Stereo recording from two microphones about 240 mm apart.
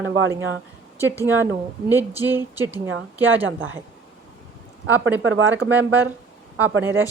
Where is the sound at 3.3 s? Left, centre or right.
Right.